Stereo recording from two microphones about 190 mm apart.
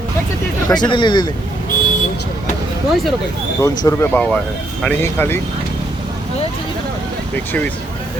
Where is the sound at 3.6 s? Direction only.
20° left (ahead or behind).